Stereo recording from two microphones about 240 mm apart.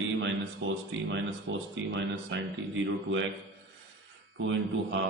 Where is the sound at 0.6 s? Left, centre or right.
Right.